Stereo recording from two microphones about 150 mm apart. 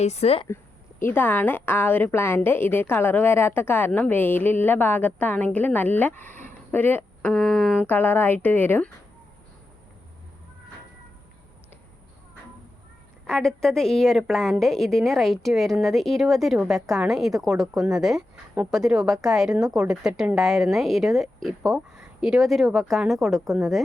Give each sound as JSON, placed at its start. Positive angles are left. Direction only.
{"t": 0.0, "sound": "speech", "side_deg": 45}
{"t": 0.4, "sound": "a woman's voice", "side_deg": 15}
{"t": 7.9, "sound": "a woman's voice", "side_deg": 10}
{"t": 13.2, "sound": "a woman's voice", "side_deg": 5}